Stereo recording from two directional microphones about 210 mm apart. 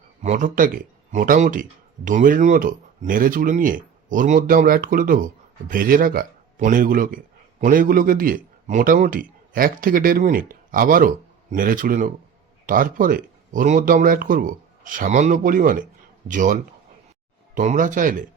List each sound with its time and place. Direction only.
0.2 s speech: 35° right (ahead or behind)